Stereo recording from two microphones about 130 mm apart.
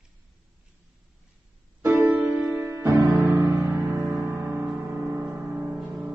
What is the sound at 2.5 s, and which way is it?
Music, 20° right (ahead or behind).